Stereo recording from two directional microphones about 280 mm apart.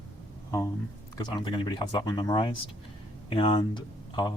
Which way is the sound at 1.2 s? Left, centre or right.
Centre.